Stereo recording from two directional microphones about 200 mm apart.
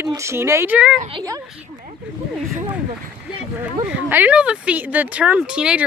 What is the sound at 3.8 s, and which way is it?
Speech, 10° right (ahead or behind).